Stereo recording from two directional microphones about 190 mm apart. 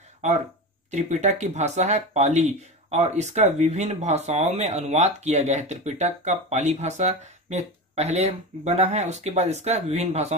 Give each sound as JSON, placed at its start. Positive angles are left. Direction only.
{"t": 0.9, "sound": "speech", "side_deg": -35}